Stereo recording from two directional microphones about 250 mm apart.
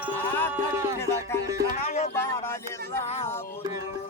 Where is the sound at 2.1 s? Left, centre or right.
Centre.